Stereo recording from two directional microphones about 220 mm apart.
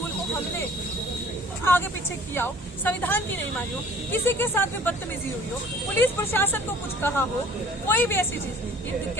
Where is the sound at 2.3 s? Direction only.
10° left (ahead or behind).